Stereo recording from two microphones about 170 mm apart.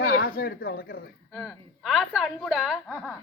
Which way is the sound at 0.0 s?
60° left (ahead or behind).